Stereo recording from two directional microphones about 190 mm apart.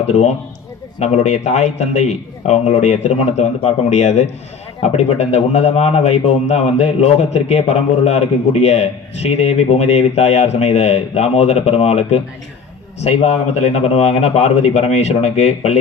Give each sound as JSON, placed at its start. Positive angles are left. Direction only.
{"t": 0.1, "sound": "a man's voice", "side_deg": 35}